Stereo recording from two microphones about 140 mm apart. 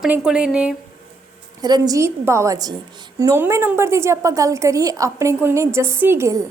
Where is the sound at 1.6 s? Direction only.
25° right (ahead or behind).